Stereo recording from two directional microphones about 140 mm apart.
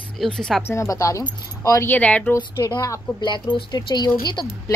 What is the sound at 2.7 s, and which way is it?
A woman's voice, 25° left (ahead or behind).